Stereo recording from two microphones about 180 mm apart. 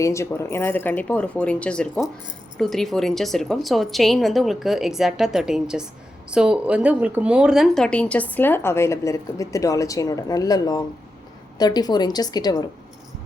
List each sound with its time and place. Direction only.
0.0 s a woman's voice: 15° left (ahead or behind)